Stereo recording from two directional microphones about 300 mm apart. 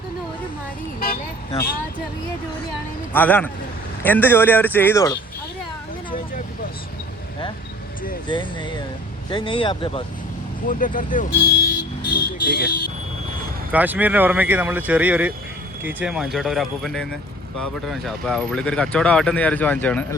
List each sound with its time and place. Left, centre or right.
0.9 s speech: left
3.1 s speech: centre
8.3 s speech: centre; by 12.7 s left
13.7 s speech: centre